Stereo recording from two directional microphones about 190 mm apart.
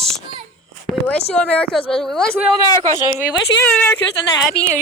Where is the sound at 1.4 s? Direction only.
5° left (ahead or behind).